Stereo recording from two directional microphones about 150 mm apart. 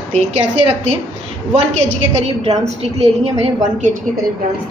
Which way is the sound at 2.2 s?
45° right (ahead or behind).